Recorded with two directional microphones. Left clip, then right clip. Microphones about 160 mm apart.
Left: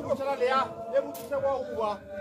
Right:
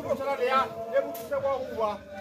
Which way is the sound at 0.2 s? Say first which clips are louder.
Right 1 dB; 25° left (ahead or behind).